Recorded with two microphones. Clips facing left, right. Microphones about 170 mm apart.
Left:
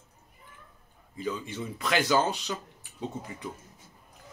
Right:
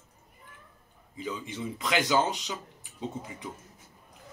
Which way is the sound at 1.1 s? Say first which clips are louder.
Left 2 dB; 15° right (ahead or behind).